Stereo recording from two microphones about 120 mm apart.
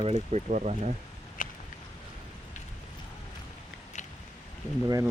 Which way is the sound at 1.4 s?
90° left.